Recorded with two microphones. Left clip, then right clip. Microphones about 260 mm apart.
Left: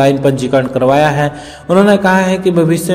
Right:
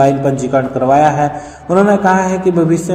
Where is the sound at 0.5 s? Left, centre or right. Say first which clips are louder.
Even; left.